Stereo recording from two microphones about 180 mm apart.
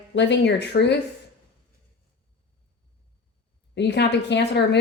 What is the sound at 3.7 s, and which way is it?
Speech, 70° left (ahead or behind).